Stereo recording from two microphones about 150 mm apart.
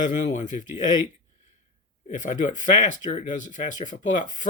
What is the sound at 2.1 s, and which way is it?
Speech, 55° left (ahead or behind).